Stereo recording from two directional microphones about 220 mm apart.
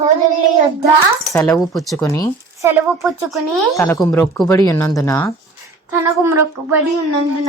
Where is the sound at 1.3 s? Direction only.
15° left (ahead or behind).